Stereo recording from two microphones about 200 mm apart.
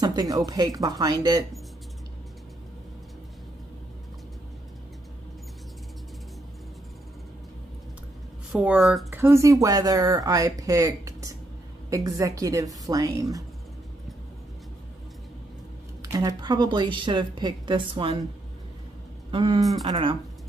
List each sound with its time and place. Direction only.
0.0 s a woman's voice: 20° right (ahead or behind)
8.5 s speech: centre (ahead or behind)
9.1 s speech: 15° right (ahead or behind)
16.0 s a woman's voice: 15° right (ahead or behind)
19.3 s a woman's voice: 25° right (ahead or behind)